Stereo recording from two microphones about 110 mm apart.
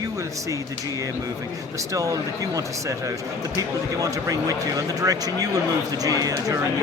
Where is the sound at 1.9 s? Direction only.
30° right (ahead or behind).